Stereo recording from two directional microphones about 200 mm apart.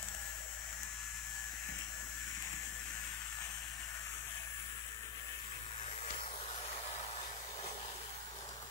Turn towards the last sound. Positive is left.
turn(degrees=30)  # may be behind; listen again after turning